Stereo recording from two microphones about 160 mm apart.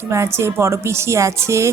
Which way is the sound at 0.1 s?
15° right (ahead or behind).